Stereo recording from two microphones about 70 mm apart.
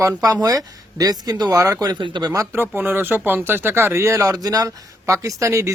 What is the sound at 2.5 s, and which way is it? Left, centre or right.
Speech, right.